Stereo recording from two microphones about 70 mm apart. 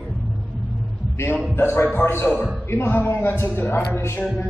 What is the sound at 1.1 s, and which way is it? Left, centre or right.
A man's voice, left.